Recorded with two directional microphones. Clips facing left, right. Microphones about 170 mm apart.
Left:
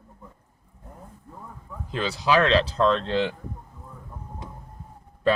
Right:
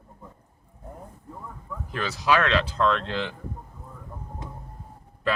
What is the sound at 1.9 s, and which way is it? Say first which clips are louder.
Speech: left 1 dB; 25° left (ahead or behind).